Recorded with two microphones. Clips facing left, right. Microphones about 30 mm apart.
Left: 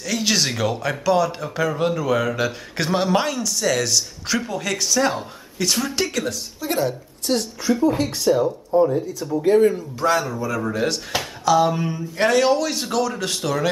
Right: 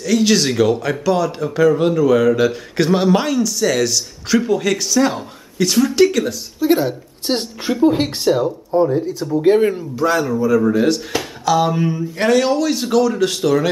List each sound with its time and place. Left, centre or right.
0.0 s a man's voice: centre
6.7 s a woman's voice: centre
7.2 s speech: right
9.9 s a man's voice: centre